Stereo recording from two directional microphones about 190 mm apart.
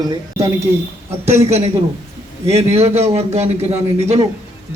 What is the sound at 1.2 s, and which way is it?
A man's voice, 35° right (ahead or behind).